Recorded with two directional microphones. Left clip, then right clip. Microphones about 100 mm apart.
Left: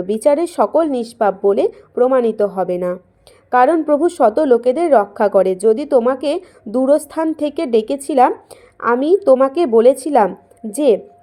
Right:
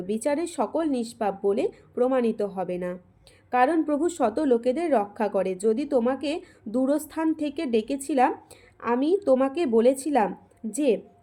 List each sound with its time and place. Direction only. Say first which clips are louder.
0.1 s a woman's voice: left 12 dB; 35° left (ahead or behind)